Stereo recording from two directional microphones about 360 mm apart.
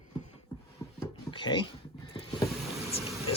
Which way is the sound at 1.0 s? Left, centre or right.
Centre.